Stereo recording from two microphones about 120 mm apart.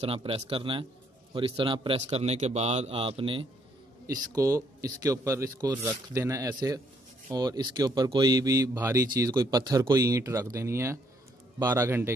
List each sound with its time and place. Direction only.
0.0 s a man's voice: 50° right (ahead or behind)
4.1 s speech: 30° right (ahead or behind)